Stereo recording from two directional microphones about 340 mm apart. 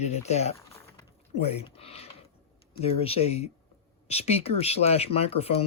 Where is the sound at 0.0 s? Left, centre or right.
Centre.